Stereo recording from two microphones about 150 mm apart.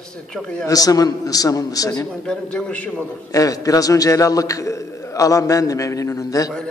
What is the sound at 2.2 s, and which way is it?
Speech, 5° left (ahead or behind).